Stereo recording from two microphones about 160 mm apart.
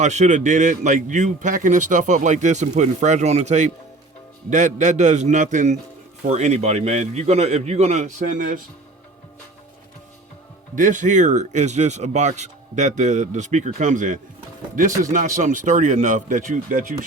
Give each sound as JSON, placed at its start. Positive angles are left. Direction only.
{"t": 0.0, "sound": "a man's voice", "side_deg": -50}
{"t": 10.8, "sound": "a man's voice", "side_deg": -55}